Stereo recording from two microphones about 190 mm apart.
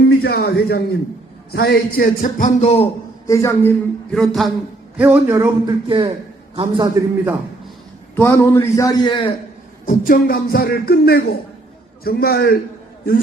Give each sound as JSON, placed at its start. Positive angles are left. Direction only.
{"t": 0.2, "sound": "speech", "side_deg": 55}
{"t": 3.2, "sound": "speech", "side_deg": 15}
{"t": 4.9, "sound": "a man's voice", "side_deg": -10}
{"t": 8.1, "sound": "speech", "side_deg": 15}
{"t": 9.8, "sound": "speech", "side_deg": 45}